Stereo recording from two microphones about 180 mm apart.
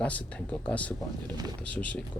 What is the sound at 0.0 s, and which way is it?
Speech, 5° left (ahead or behind).